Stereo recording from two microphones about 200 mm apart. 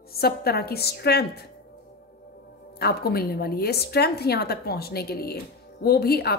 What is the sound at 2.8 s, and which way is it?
A woman's voice, 50° left (ahead or behind).